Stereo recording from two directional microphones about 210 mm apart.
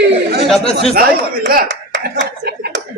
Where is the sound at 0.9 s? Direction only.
45° right (ahead or behind).